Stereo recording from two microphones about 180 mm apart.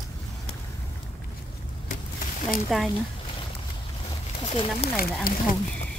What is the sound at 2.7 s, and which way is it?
Speech, centre (ahead or behind).